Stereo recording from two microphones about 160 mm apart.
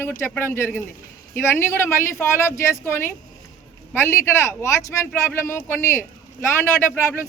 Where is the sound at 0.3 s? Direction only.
15° left (ahead or behind).